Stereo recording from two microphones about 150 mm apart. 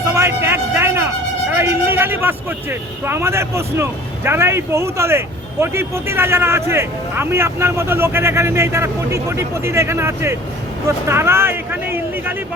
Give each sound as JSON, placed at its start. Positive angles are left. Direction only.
{"t": 0.1, "sound": "vehicle", "side_deg": -20}
{"t": 1.5, "sound": "speech", "side_deg": -15}